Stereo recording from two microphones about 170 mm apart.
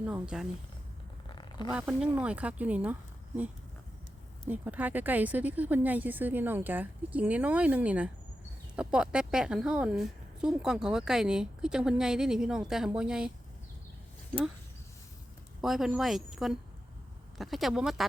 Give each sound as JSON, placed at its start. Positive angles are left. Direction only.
{"t": 0.0, "sound": "a woman's voice", "side_deg": -5}
{"t": 1.3, "sound": "a sound", "side_deg": 25}
{"t": 1.7, "sound": "a woman's voice", "side_deg": -5}
{"t": 15.6, "sound": "a woman's voice", "side_deg": 0}